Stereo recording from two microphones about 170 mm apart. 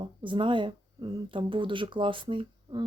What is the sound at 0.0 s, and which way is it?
Speech, 30° right (ahead or behind).